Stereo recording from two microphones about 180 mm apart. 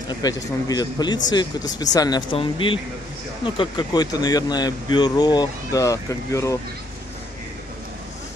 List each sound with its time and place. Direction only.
0.1 s speech: 20° left (ahead or behind)